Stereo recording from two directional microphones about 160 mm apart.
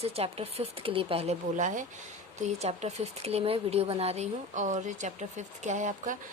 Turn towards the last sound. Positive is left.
turn(degrees=-50)  # may be behind; listen again after turning